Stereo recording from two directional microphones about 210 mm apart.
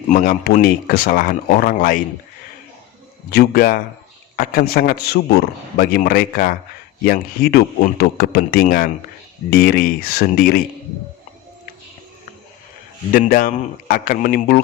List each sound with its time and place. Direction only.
0.1 s a man's voice: 40° left (ahead or behind)
3.2 s a man's voice: 45° left (ahead or behind)
13.1 s a man's voice: 40° left (ahead or behind)